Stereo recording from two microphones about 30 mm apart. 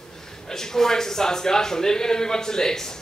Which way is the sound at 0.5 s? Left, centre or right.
Centre.